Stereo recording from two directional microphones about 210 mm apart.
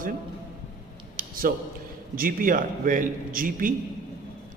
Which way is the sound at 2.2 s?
40° right (ahead or behind).